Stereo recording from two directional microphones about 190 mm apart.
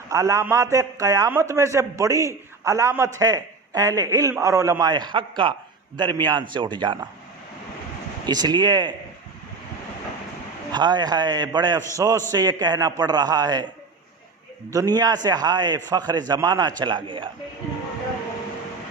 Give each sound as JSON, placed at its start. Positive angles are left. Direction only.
{"t": 0.1, "sound": "a man's voice", "side_deg": -15}
{"t": 8.3, "sound": "a man's voice", "side_deg": -20}
{"t": 10.7, "sound": "a man's voice", "side_deg": -20}
{"t": 14.7, "sound": "a man's voice", "side_deg": -20}